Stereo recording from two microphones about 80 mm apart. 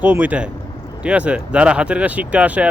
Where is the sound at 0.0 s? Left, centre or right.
Centre.